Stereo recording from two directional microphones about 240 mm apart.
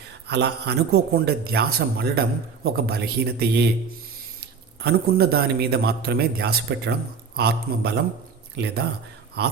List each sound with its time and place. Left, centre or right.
0.3 s a man's voice: right
4.8 s a man's voice: right